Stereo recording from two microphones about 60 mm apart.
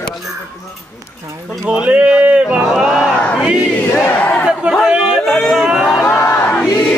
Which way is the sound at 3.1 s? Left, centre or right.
Left.